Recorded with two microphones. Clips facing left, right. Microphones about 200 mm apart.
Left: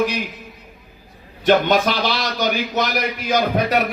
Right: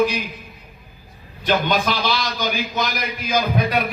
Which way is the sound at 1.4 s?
70° left (ahead or behind).